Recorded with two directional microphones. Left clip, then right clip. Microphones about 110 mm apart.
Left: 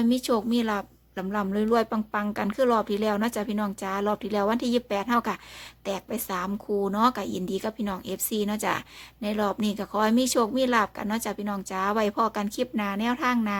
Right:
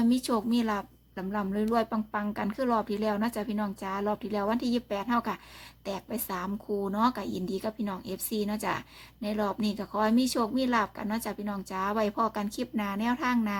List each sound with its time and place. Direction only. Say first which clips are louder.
0.0 s a woman's voice: left 3 dB; 10° left (ahead or behind)